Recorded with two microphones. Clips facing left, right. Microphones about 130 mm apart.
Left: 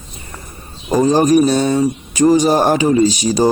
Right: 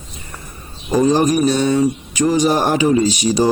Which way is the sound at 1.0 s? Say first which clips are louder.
Left 3 dB; 40° left (ahead or behind).